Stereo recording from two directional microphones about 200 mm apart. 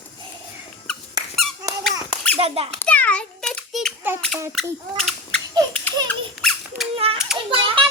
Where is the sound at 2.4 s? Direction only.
30° right (ahead or behind).